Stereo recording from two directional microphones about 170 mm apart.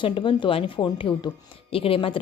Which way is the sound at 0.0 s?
30° left (ahead or behind).